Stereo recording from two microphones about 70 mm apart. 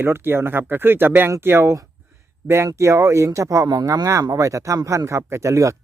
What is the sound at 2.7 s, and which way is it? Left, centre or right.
Speech, right.